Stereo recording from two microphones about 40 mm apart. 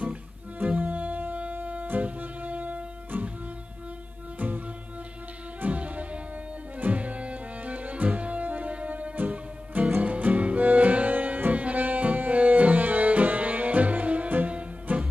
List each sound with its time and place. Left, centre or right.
0.0 s music: right
4.4 s music: right
5.7 s music: right
9.1 s music: right